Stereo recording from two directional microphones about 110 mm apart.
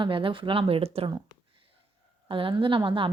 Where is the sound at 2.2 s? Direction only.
50° right (ahead or behind).